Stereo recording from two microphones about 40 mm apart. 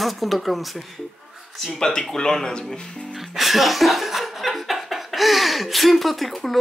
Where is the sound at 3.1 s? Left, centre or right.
Centre.